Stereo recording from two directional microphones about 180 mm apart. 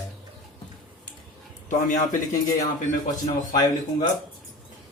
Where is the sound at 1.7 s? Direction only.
45° left (ahead or behind).